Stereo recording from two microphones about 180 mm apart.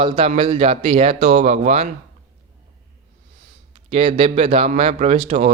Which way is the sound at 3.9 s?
30° right (ahead or behind).